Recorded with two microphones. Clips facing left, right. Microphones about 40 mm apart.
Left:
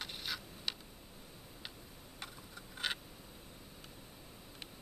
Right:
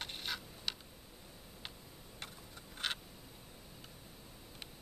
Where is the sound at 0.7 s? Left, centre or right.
Centre.